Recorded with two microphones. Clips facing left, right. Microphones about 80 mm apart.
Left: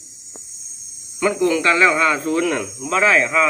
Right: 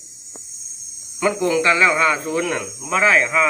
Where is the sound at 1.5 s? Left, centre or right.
Centre.